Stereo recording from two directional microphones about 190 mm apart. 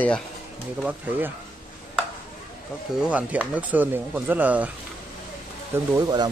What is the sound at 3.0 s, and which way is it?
Speech, 5° right (ahead or behind).